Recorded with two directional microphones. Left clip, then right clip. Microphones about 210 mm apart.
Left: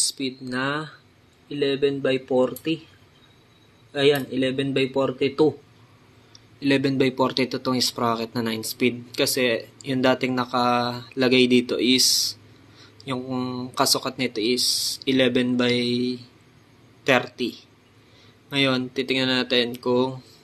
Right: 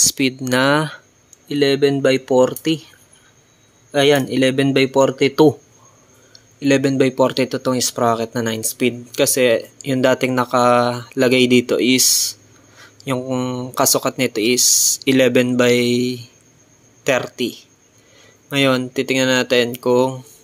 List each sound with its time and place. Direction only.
0.0 s speech: 45° right (ahead or behind)
3.9 s speech: 45° right (ahead or behind)
6.6 s speech: 25° right (ahead or behind)